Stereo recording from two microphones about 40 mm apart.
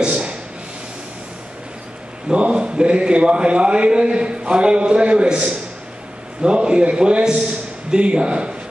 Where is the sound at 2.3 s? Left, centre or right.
Right.